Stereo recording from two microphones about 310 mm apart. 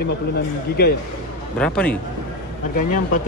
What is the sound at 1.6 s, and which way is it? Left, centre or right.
Speech, centre.